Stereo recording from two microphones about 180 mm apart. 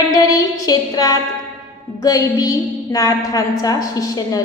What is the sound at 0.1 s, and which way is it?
Child singing, 20° left (ahead or behind).